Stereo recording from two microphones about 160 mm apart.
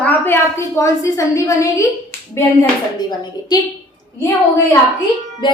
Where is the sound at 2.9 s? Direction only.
25° left (ahead or behind).